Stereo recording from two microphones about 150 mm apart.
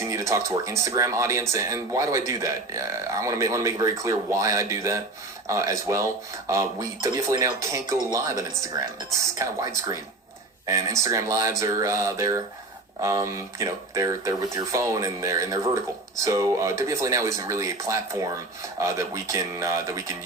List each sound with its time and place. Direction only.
0.0 s speech: 20° right (ahead or behind)